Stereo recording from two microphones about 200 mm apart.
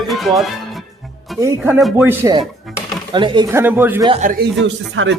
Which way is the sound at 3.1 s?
25° right (ahead or behind).